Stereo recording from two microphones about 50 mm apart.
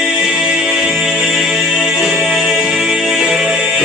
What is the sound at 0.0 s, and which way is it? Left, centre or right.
Music, centre.